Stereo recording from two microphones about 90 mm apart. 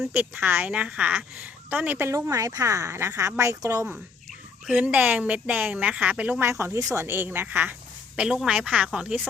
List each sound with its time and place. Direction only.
0.1 s a woman's voice: 25° right (ahead or behind)
2.0 s a woman's voice: 35° right (ahead or behind)
4.7 s speech: 15° right (ahead or behind)
6.4 s a woman's voice: 30° right (ahead or behind); by 9.2 s 10° right (ahead or behind)